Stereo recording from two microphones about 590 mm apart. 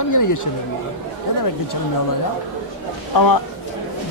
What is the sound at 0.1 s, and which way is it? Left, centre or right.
Speech, left.